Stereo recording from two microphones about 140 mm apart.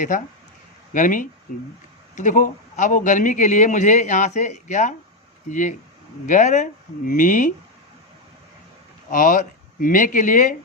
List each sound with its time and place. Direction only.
0.9 s a man's voice: 70° left (ahead or behind)
9.0 s speech: 75° left (ahead or behind)